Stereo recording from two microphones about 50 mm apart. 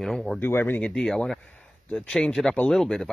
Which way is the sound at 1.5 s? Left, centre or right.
Left.